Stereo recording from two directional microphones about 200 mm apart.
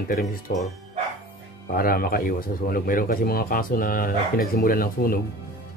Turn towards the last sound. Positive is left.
turn(degrees=45)  # may be behind; listen again after turning